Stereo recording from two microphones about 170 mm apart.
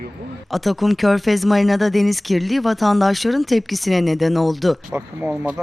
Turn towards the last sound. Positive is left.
turn(degrees=-10)  # may be behind; listen again after turning